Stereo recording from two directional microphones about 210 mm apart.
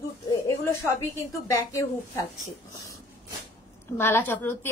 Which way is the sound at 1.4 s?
15° left (ahead or behind).